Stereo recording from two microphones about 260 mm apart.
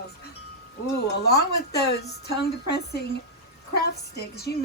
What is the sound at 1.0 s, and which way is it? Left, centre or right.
A woman's voice, left.